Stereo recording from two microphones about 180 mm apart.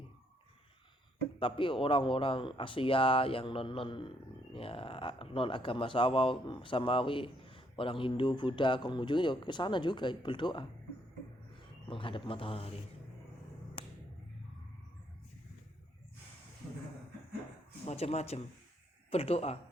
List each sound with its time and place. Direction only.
1.4 s speech: 30° left (ahead or behind)
11.9 s speech: 30° left (ahead or behind)
13.8 s a sound: 30° left (ahead or behind)
17.8 s speech: 35° left (ahead or behind)